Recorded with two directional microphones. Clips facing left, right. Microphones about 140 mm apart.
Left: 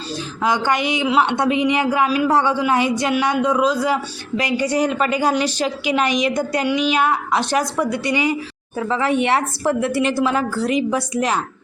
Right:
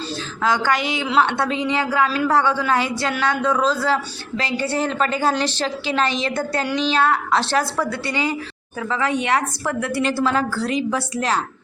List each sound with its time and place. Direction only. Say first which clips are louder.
0.4 s a woman's voice: left 1 dB; 20° left (ahead or behind)